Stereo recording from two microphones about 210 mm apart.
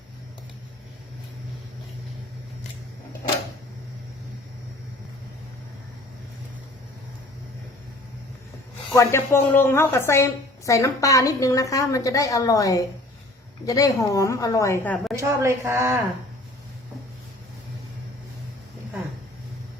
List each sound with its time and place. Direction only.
8.9 s a woman's voice: 15° left (ahead or behind)
15.1 s a woman's voice: 15° right (ahead or behind)